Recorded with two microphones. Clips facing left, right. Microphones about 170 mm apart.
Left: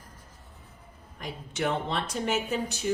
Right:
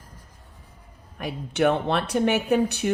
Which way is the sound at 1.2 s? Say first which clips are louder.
Right 9 dB; 65° right (ahead or behind).